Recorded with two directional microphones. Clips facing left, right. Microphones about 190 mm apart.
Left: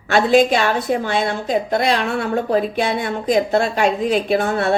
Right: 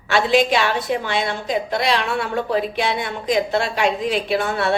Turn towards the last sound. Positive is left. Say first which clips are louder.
# left 3 dB
turn(degrees=45)  # may be behind; listen again after turning